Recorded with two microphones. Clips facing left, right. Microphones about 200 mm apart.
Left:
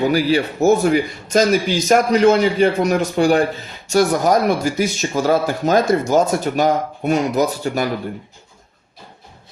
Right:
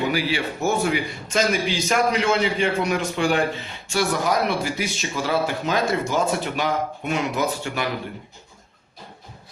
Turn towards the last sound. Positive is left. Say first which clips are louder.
# left 6 dB
turn(degrees=40)  # may be behind; listen again after turning